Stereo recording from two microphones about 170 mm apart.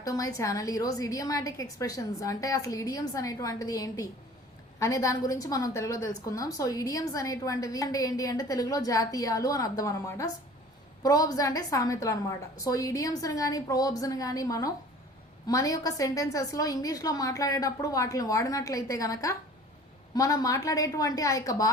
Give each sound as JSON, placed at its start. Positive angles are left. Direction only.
{"t": 0.0, "sound": "a woman's voice", "side_deg": 20}